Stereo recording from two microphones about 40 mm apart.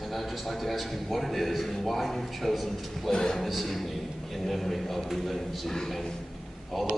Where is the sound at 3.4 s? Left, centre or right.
Centre.